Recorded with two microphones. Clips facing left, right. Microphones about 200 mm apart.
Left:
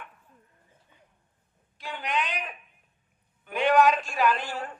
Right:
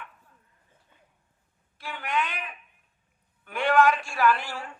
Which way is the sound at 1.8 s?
20° left (ahead or behind).